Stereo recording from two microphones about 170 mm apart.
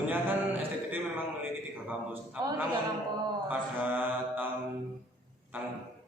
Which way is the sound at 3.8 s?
10° right (ahead or behind).